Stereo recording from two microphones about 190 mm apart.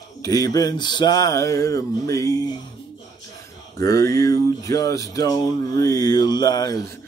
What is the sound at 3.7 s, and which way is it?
Speech, 15° left (ahead or behind).